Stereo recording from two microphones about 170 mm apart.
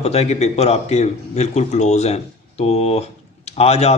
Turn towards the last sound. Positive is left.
turn(degrees=40)  # may be behind; listen again after turning